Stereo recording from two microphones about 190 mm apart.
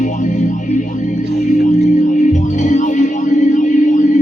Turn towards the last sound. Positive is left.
turn(degrees=40)  # may be behind; listen again after turning